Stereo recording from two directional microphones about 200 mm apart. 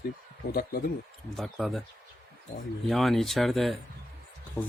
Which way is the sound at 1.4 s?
Centre (ahead or behind).